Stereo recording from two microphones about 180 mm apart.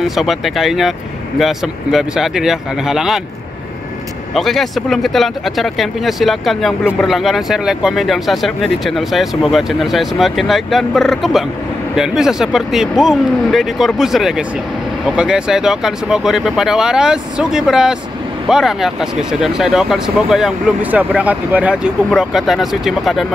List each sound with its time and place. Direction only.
0.0 s speech: centre (ahead or behind)
4.3 s speech: centre (ahead or behind)